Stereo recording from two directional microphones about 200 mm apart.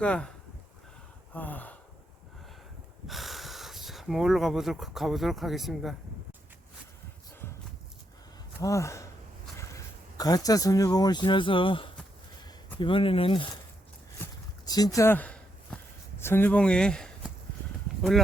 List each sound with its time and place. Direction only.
0.0 s speech: 5° left (ahead or behind)
1.3 s gasp: 10° left (ahead or behind)
3.1 s speech: centre (ahead or behind)
8.6 s speech: 15° left (ahead or behind)
14.2 s walk: 20° left (ahead or behind); by 17.3 s 5° left (ahead or behind)